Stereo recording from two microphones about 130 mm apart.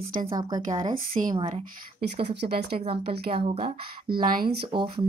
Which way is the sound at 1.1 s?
55° right (ahead or behind).